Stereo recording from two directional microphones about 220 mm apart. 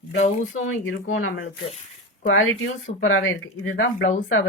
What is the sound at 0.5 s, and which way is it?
Speech, 65° left (ahead or behind).